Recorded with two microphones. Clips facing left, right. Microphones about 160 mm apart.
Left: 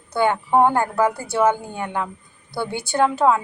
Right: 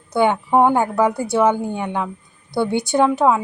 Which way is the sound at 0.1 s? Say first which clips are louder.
Right 2 dB; 15° right (ahead or behind).